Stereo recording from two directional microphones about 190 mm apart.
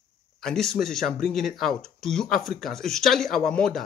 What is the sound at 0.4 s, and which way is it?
Speech, 5° left (ahead or behind).